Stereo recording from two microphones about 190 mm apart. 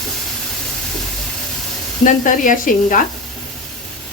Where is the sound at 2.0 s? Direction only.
45° left (ahead or behind).